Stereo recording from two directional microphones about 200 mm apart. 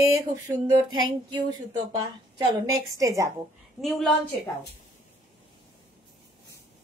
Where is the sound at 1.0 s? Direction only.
20° right (ahead or behind).